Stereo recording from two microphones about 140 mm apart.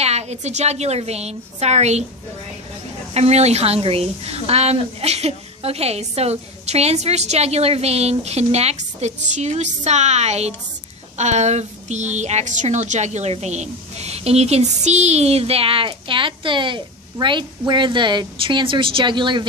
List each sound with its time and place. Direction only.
0.0 s a woman's voice: 50° right (ahead or behind)
3.1 s a woman's voice: 50° right (ahead or behind); by 19.4 s 35° right (ahead or behind)